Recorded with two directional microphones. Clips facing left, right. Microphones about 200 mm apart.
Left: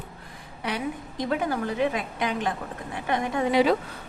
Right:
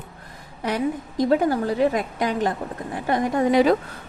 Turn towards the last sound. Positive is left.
turn(degrees=-45)  # may be behind; listen again after turning